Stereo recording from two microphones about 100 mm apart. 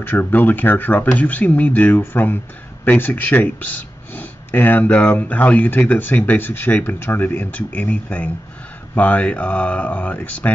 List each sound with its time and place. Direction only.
0.0 s speech: 20° left (ahead or behind)